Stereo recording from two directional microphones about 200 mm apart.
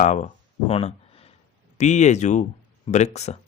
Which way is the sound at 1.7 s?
35° left (ahead or behind).